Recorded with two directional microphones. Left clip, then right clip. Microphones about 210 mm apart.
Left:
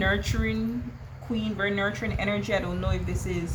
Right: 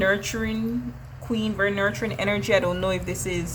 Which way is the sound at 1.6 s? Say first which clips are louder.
Right 4 dB; 40° right (ahead or behind).